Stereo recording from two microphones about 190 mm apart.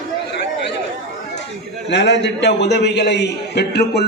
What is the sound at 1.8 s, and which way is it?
A man's voice, 65° left (ahead or behind).